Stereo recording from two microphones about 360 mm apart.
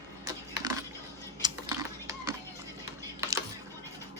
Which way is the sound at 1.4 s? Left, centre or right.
Centre.